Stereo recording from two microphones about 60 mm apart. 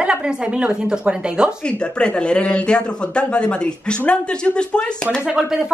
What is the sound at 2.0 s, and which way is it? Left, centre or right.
A woman's voice, centre.